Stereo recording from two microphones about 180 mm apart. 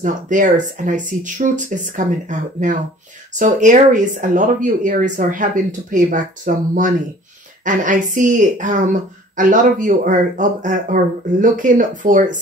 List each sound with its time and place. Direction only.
0.0 s speech: 45° right (ahead or behind)